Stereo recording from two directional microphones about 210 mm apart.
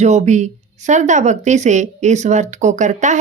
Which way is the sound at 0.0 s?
35° right (ahead or behind).